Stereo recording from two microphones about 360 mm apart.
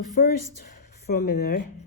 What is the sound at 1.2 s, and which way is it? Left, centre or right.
Speech, left.